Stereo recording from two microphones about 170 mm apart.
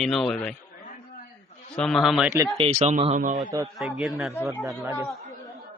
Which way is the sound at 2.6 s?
40° right (ahead or behind).